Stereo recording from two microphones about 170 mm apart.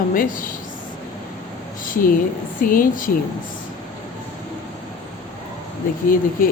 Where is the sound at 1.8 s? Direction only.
50° left (ahead or behind).